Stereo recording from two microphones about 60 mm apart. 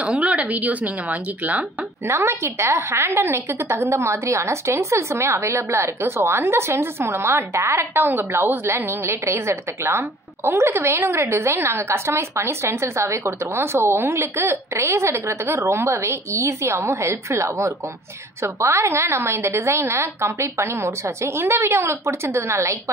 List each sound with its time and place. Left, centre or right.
0.2 s speech: right
2.0 s a woman's voice: right
3.9 s a woman's voice: right